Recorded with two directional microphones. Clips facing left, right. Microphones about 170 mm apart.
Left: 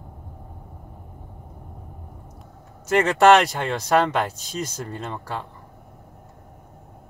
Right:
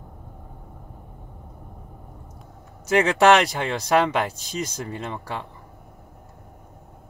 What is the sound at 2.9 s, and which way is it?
Speech, centre (ahead or behind).